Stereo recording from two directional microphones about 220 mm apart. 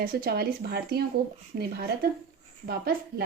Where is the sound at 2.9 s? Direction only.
40° right (ahead or behind).